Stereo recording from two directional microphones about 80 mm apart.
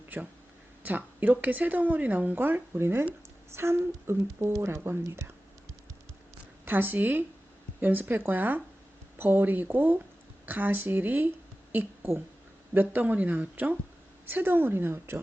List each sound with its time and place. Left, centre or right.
0.1 s a woman's voice: right
6.7 s a woman's voice: right